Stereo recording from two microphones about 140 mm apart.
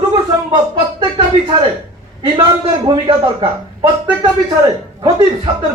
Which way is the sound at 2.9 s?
40° right (ahead or behind).